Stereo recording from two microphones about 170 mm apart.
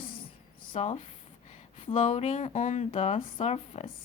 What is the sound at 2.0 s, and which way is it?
Speech, 45° left (ahead or behind).